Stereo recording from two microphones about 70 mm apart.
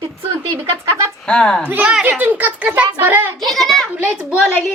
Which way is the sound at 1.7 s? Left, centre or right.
Right.